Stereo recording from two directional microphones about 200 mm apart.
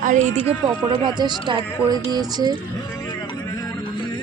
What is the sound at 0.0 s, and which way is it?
Speech, 40° right (ahead or behind).